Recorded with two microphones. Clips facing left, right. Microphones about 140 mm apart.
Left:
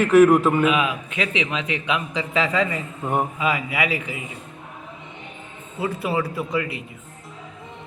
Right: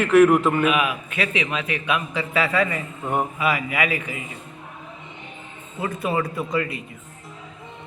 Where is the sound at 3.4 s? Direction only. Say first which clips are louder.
Even; 20° left (ahead or behind).